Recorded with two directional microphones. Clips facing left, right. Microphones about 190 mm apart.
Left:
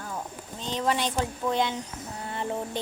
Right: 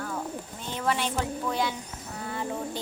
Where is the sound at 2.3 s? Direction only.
25° left (ahead or behind).